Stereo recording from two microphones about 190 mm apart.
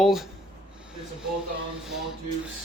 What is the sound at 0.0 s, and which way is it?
Speech, centre (ahead or behind).